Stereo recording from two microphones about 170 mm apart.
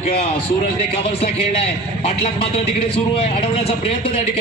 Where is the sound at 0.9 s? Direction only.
35° left (ahead or behind).